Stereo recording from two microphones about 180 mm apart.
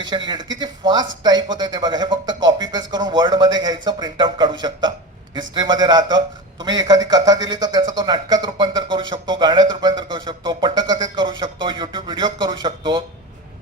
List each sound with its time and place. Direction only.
0.3 s a man's voice: 25° right (ahead or behind)